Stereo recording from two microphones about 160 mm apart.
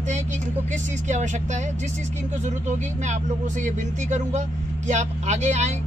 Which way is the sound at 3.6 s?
50° right (ahead or behind).